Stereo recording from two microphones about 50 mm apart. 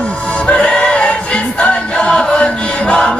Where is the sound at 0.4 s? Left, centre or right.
Left.